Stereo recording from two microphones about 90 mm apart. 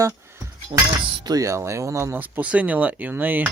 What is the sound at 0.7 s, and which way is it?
Speech, 50° right (ahead or behind).